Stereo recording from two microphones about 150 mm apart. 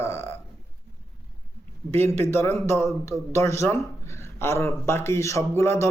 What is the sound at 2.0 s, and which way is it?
A man's voice, 15° left (ahead or behind).